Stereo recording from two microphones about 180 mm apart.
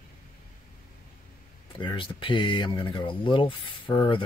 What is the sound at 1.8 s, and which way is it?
Speech, 25° left (ahead or behind).